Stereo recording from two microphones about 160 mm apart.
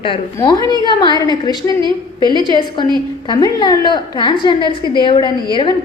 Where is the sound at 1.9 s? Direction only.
25° right (ahead or behind).